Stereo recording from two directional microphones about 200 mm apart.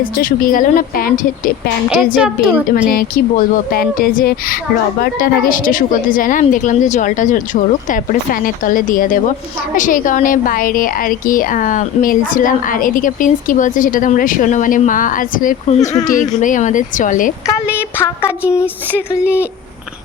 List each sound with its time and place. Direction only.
0.0 s speech: 45° left (ahead or behind)
2.1 s a sound: 5° right (ahead or behind)
2.9 s a woman's voice: 45° left (ahead or behind)
15.8 s speech: 15° left (ahead or behind)
16.0 s a woman's voice: 40° left (ahead or behind)
17.4 s speech: 15° left (ahead or behind)
19.2 s speech: 5° right (ahead or behind)